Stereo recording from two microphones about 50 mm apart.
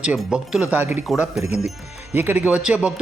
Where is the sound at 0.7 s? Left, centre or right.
Right.